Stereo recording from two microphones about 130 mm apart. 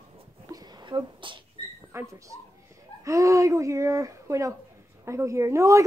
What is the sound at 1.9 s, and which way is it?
A woman's voice, 25° right (ahead or behind).